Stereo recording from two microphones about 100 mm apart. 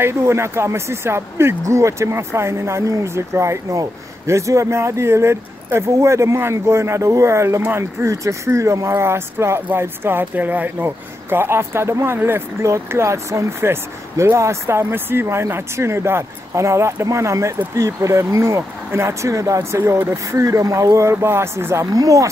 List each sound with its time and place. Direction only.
0.0 s speech: 25° right (ahead or behind)